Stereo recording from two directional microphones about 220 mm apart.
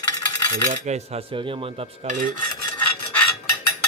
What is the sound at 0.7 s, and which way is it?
Cutlery, 30° right (ahead or behind).